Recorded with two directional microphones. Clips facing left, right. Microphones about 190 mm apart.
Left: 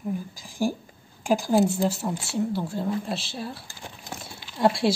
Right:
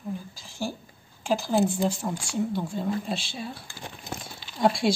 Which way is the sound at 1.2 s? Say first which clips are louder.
Left 3 dB; 15° left (ahead or behind).